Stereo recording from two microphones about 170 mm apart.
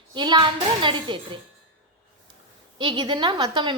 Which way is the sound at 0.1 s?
25° right (ahead or behind).